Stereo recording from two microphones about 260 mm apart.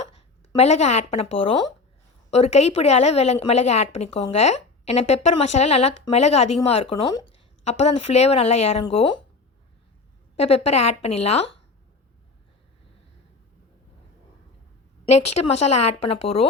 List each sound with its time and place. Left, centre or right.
0.5 s a woman's voice: left
10.3 s a woman's voice: left
15.1 s speech: left
16.0 s a woman's voice: left